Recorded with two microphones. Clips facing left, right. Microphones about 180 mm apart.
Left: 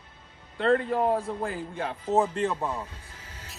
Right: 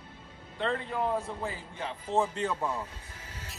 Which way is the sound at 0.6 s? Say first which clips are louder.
Left 7 dB; 55° left (ahead or behind).